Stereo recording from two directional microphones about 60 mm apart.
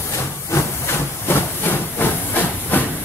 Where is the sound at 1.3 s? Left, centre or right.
Left.